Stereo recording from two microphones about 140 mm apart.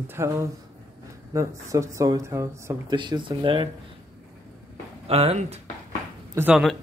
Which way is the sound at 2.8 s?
35° right (ahead or behind).